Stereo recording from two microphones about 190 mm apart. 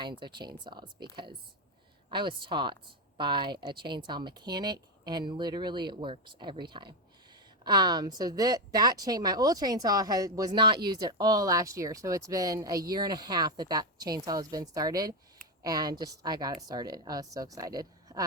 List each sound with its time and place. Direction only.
0.0 s speech: 25° right (ahead or behind)